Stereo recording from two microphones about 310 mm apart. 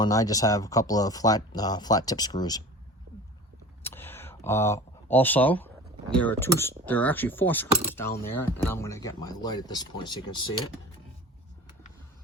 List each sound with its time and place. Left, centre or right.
0.0 s speech: centre
3.8 s a sound: centre
6.1 s speech: centre